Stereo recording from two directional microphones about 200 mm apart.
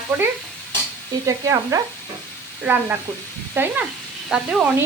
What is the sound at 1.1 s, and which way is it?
Stir, 20° right (ahead or behind).